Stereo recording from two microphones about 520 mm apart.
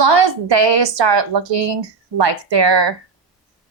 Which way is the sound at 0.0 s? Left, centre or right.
Right.